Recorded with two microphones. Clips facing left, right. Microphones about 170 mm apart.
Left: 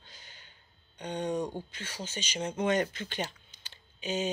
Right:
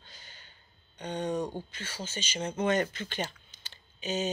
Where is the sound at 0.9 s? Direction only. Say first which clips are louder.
Even; 10° left (ahead or behind).